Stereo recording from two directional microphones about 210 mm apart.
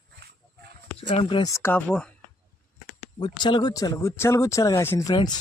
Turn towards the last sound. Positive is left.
turn(degrees=20)  # may be behind; listen again after turning